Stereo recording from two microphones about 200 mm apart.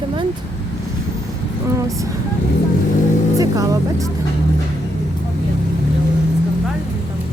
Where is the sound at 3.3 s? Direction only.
15° right (ahead or behind).